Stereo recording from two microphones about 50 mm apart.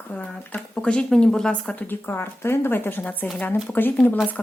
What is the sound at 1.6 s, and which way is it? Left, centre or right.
A woman's voice, left.